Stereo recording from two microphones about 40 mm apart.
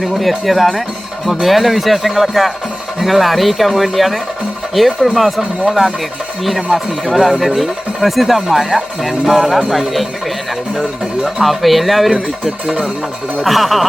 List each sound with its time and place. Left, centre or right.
0.0 s speech: centre
11.4 s speech: centre
12.6 s speech: right
13.4 s speech: centre